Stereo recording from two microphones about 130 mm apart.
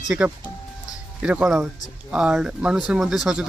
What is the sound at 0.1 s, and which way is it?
Speech, 10° right (ahead or behind).